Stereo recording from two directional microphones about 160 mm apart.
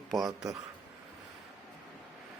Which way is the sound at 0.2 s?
25° right (ahead or behind).